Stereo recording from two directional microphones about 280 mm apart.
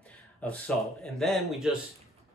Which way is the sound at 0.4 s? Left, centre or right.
Centre.